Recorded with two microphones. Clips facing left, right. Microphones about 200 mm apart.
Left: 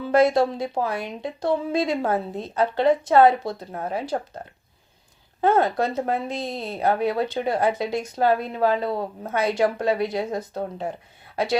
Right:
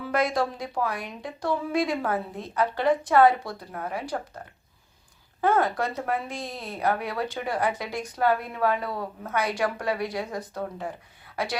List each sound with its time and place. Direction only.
0.0 s speech: 25° left (ahead or behind)
5.4 s speech: 25° left (ahead or behind)